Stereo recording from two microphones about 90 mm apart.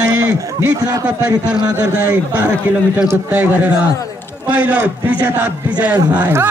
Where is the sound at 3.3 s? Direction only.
20° right (ahead or behind).